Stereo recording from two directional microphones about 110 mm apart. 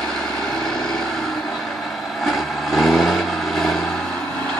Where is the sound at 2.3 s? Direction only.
Centre (ahead or behind).